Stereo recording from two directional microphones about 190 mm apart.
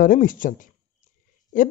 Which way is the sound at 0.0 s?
45° left (ahead or behind).